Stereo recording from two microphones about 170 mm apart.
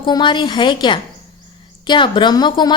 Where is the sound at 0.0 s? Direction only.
25° left (ahead or behind).